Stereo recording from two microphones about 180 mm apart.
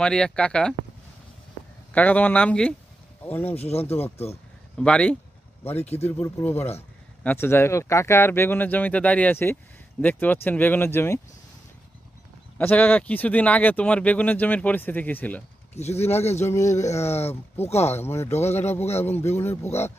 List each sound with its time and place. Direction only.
0.0 s speech: 5° left (ahead or behind)
1.9 s speech: 10° left (ahead or behind)
3.5 s speech: 35° left (ahead or behind)
4.8 s speech: 5° left (ahead or behind)
5.7 s speech: 35° left (ahead or behind)
6.1 s speech: 10° left (ahead or behind)
12.5 s speech: 10° left (ahead or behind)
15.7 s speech: 35° left (ahead or behind)
18.0 s speech: 15° left (ahead or behind)
18.3 s speech: 35° left (ahead or behind)
18.9 s speech: 10° left (ahead or behind)
19.6 s speech: 35° left (ahead or behind)